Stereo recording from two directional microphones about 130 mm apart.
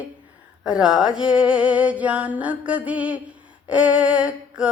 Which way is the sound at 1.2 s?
5° right (ahead or behind).